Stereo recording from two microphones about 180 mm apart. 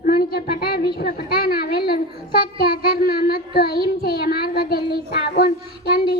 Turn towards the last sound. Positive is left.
turn(degrees=60)  # may be behind; listen again after turning